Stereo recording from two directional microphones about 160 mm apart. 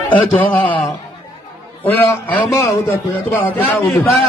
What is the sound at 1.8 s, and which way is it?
Speech, 10° left (ahead or behind).